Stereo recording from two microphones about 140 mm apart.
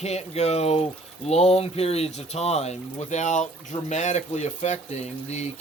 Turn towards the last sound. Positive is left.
turn(degrees=50)  # may be behind; listen again after turning